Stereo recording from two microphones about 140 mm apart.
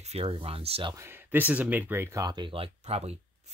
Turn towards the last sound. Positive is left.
turn(degrees=-45)  # may be behind; listen again after turning